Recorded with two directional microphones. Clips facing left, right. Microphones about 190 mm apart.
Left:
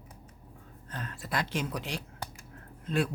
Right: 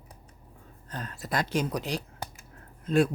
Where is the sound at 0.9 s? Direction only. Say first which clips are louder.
Right 3 dB; 40° right (ahead or behind).